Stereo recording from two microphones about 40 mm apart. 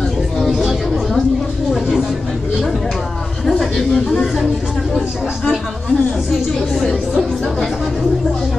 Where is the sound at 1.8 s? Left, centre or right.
Centre.